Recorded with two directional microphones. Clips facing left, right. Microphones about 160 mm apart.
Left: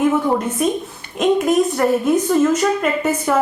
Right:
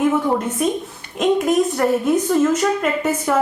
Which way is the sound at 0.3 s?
15° left (ahead or behind).